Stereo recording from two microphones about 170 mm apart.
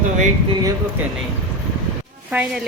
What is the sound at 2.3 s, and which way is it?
Speech, 10° right (ahead or behind).